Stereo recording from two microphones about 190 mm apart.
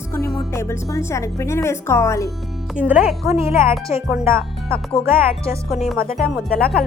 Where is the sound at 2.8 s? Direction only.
10° right (ahead or behind).